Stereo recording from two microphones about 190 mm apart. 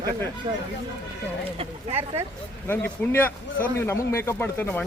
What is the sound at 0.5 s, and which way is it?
Speech, 25° right (ahead or behind).